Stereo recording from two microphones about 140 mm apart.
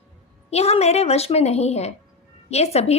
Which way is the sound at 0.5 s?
50° left (ahead or behind).